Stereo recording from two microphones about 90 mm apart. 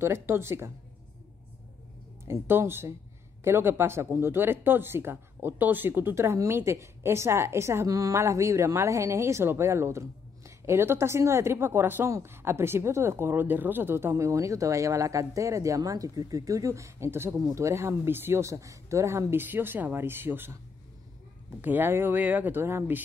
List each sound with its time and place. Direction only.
0.0 s speech: 30° right (ahead or behind)
2.2 s speech: 25° right (ahead or behind)